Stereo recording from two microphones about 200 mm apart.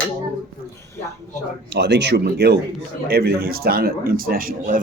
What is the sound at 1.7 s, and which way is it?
A man's voice, 60° right (ahead or behind).